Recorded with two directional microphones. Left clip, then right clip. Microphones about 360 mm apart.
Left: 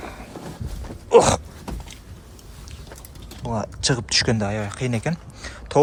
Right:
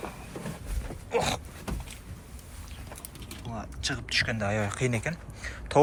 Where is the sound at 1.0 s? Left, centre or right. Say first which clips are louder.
Left 14 dB; left.